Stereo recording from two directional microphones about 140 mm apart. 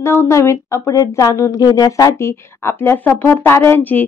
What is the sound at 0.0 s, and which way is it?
Speech, 20° left (ahead or behind).